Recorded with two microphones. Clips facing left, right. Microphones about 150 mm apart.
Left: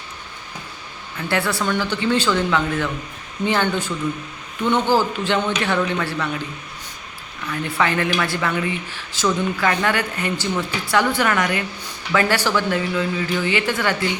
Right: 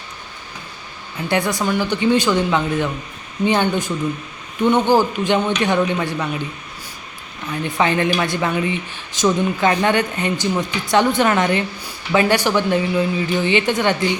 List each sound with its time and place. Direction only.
1.3 s speech: 15° right (ahead or behind)
7.4 s a woman's voice: 20° right (ahead or behind)